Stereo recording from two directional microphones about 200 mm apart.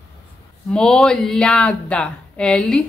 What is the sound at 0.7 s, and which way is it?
Speech, 5° left (ahead or behind).